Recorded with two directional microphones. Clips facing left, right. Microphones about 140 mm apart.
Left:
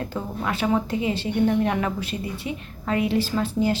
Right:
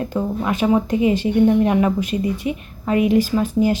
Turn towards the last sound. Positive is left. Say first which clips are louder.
# right 5 dB
turn(degrees=-15)  # may be behind; listen again after turning